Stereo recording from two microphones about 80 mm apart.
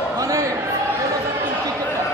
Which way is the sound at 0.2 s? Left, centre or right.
Right.